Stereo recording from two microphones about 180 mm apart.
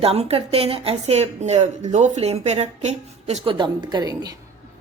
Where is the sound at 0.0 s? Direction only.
35° right (ahead or behind).